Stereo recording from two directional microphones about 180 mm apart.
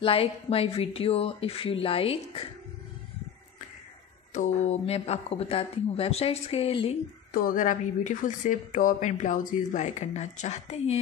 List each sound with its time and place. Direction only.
0.0 s speech: 30° left (ahead or behind)
4.3 s speech: 40° left (ahead or behind)
7.3 s a woman's voice: 50° left (ahead or behind)